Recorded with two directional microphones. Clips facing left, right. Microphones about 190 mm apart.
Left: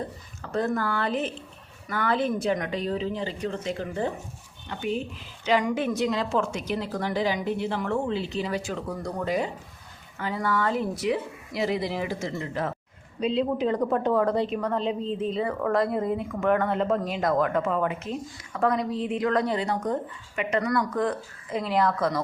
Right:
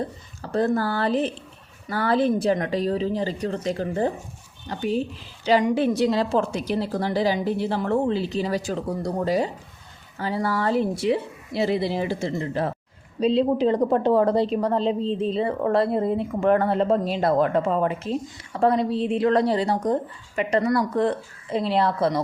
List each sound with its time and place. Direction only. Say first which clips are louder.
0.4 s a woman's voice: right 4 dB; 35° right (ahead or behind)